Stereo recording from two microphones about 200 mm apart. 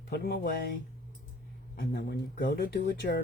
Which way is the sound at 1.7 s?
50° left (ahead or behind).